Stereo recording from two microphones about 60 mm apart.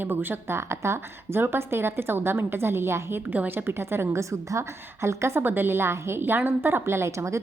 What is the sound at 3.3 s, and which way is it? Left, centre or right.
Speech, right.